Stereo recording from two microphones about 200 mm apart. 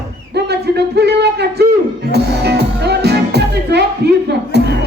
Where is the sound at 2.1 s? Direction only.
55° right (ahead or behind).